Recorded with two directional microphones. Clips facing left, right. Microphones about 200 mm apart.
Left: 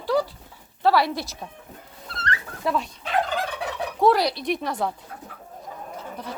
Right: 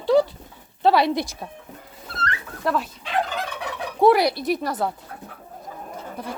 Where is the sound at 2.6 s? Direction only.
Centre (ahead or behind).